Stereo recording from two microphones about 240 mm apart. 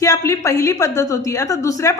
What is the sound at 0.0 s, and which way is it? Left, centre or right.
A woman's voice, centre.